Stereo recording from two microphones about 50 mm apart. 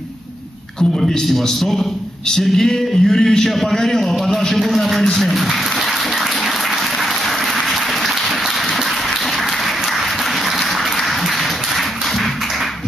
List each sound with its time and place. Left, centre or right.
0.7 s a man's voice: centre